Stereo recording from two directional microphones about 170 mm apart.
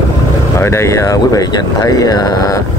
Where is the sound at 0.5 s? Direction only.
15° left (ahead or behind).